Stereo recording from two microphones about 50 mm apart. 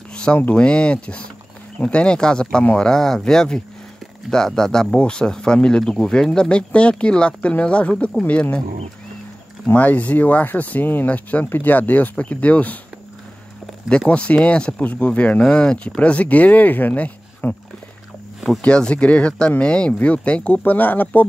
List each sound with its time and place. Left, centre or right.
0.1 s a sound: left
0.6 s speech: left
9.8 s speech: left
11.4 s speech: left
13.8 s speech: left
14.8 s speech: left
15.4 s speech: centre; by 17.6 s left
18.6 s speech: left